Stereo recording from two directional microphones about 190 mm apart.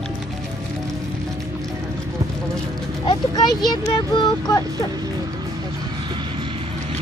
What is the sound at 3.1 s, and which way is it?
Speech, 20° left (ahead or behind).